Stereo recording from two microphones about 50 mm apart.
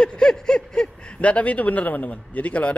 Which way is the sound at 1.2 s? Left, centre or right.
Left.